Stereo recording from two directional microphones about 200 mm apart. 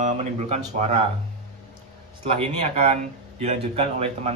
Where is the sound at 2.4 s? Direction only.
30° right (ahead or behind).